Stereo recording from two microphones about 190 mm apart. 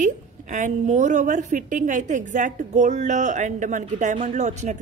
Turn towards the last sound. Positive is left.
turn(degrees=-40)  # may be behind; listen again after turning